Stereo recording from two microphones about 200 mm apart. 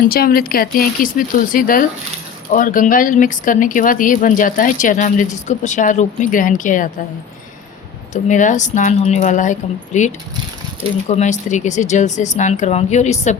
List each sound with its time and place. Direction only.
0.0 s speech: 50° left (ahead or behind)
8.1 s speech: 40° left (ahead or behind)
11.1 s speech: 35° left (ahead or behind)